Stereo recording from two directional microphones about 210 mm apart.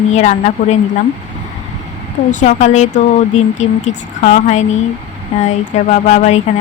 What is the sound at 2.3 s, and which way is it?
Speech, 35° left (ahead or behind).